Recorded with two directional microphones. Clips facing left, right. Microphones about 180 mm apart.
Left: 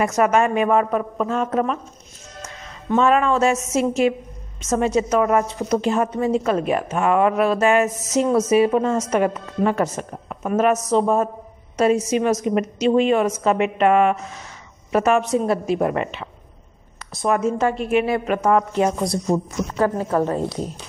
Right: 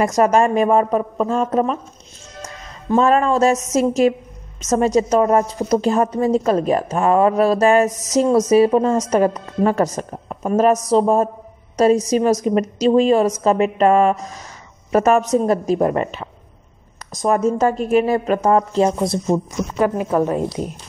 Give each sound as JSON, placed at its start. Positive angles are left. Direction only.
{"t": 0.0, "sound": "a woman's voice", "side_deg": -35}